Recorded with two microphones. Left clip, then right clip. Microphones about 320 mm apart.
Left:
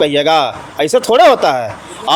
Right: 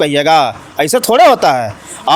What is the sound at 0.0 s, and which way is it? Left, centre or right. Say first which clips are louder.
Speech: right 1 dB; right.